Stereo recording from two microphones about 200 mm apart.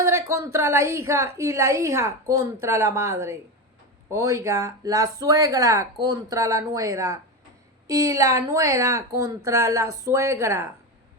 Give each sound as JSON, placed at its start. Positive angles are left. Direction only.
{"t": 0.0, "sound": "a woman's voice", "side_deg": -15}